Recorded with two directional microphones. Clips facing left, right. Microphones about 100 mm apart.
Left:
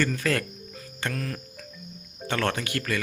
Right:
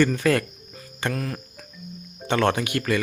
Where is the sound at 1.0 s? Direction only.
20° right (ahead or behind).